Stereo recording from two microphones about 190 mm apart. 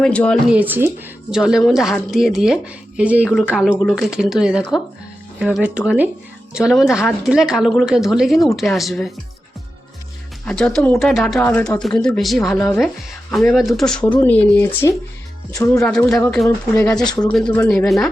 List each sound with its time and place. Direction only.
0.0 s speech: 5° left (ahead or behind)
0.5 s speech: 10° right (ahead or behind)
10.4 s speech: 5° left (ahead or behind)
15.8 s speech: 5° left (ahead or behind)
17.1 s speech: 20° left (ahead or behind)
17.7 s speech: centre (ahead or behind)